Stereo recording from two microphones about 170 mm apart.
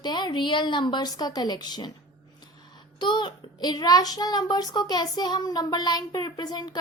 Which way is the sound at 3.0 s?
25° left (ahead or behind).